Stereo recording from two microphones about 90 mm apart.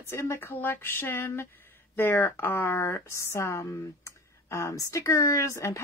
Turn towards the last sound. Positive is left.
turn(degrees=35)  # may be behind; listen again after turning